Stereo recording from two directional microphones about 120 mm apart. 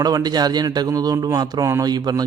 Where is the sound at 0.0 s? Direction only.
35° right (ahead or behind).